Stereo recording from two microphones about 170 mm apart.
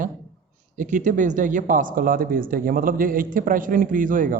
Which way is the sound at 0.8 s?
50° right (ahead or behind).